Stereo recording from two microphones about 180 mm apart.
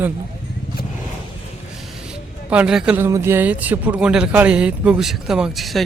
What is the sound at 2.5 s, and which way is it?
Speech, 5° right (ahead or behind).